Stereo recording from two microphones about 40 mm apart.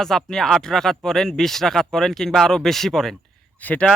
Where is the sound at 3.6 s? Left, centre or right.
Left.